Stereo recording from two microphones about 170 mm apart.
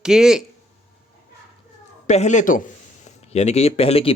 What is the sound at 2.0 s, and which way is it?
Speech, 45° left (ahead or behind).